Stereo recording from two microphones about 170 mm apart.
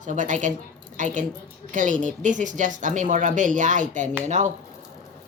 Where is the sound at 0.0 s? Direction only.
50° right (ahead or behind).